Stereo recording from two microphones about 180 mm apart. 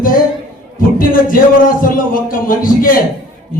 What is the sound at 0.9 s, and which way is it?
A man's voice, 50° left (ahead or behind).